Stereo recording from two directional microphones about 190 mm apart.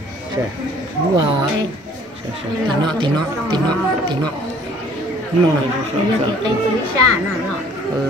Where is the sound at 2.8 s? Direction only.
25° right (ahead or behind).